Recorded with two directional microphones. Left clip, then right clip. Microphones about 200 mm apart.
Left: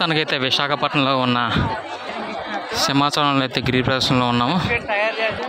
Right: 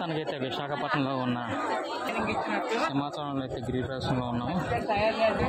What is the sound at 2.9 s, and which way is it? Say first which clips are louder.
A man's voice: left 14 dB; 20° left (ahead or behind).